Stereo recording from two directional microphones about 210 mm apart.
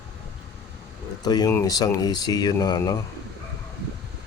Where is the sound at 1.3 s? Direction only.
15° left (ahead or behind).